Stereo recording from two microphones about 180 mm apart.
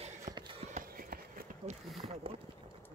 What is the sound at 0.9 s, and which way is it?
Run, 50° right (ahead or behind).